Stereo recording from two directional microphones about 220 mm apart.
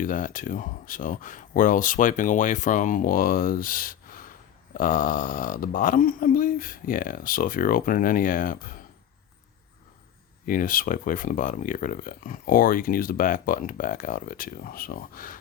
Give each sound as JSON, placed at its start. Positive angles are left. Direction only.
{"t": 0.0, "sound": "speech", "side_deg": 35}
{"t": 10.4, "sound": "speech", "side_deg": 40}